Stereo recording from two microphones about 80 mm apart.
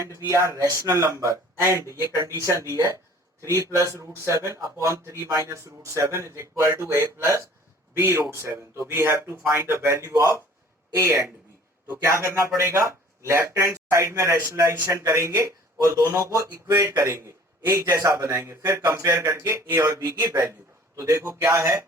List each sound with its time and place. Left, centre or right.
0.0 s speech: right
13.5 s a man's voice: right